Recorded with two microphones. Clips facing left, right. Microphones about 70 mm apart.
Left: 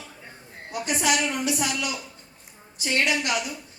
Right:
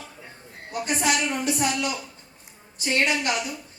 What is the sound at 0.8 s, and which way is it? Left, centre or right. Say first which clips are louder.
Speech: even; right.